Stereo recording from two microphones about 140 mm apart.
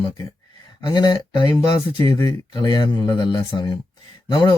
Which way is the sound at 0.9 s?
30° left (ahead or behind).